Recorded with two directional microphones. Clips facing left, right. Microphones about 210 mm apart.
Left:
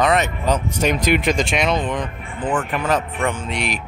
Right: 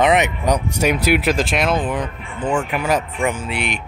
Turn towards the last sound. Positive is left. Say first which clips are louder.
# right 1 dB
turn(degrees=-5)  # may be behind; listen again after turning